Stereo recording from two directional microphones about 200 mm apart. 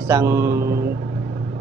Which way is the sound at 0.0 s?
15° right (ahead or behind).